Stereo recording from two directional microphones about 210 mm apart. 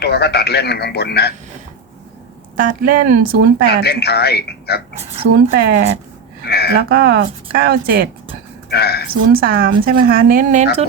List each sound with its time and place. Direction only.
0.0 s speech: 50° left (ahead or behind)
2.6 s speech: 40° right (ahead or behind)
3.8 s speech: 50° left (ahead or behind)
5.3 s speech: 50° right (ahead or behind)
6.5 s a sound: 50° left (ahead or behind)
6.7 s speech: 50° right (ahead or behind)
8.7 s speech: 50° left (ahead or behind)
9.3 s speech: 45° right (ahead or behind)